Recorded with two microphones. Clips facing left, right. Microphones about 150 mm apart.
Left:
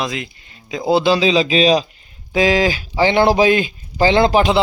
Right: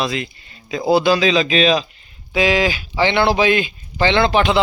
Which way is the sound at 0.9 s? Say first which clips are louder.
Even; 25° left (ahead or behind).